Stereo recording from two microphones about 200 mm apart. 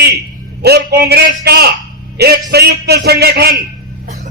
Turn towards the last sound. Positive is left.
turn(degrees=-50)  # may be behind; listen again after turning